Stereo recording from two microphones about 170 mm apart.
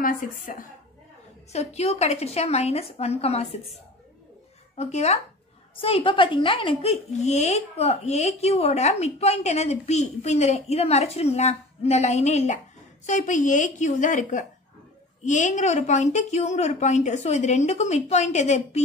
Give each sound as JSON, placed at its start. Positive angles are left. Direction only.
{"t": 0.0, "sound": "a woman's voice", "side_deg": 55}
{"t": 1.5, "sound": "a woman's voice", "side_deg": 40}
{"t": 4.7, "sound": "a woman's voice", "side_deg": 40}